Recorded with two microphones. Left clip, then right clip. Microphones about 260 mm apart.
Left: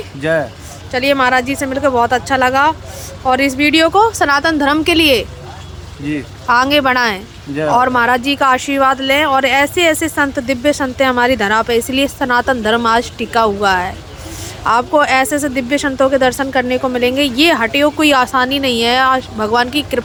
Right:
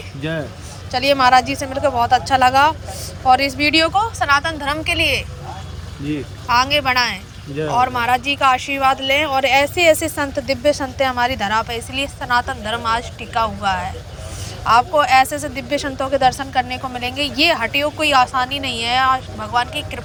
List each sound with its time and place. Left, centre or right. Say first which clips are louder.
0.9 s a woman's voice: left 1 dB; centre